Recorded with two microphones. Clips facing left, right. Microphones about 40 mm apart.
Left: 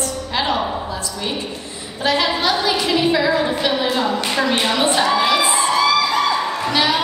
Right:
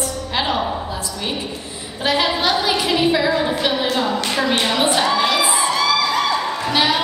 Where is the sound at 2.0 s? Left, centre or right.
Centre.